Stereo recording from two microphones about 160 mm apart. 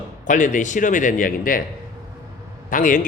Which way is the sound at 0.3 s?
50° left (ahead or behind).